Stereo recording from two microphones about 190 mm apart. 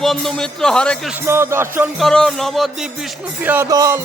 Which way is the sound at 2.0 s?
5° left (ahead or behind).